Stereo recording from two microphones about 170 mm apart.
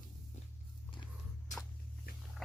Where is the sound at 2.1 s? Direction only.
60° left (ahead or behind).